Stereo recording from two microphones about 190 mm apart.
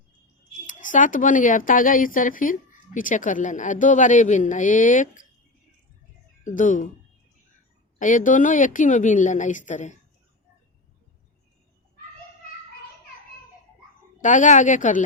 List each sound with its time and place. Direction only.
0.7 s speech: 45° left (ahead or behind)
6.4 s speech: 45° left (ahead or behind)
7.9 s a woman's voice: 40° left (ahead or behind)
14.2 s a woman's voice: 40° left (ahead or behind)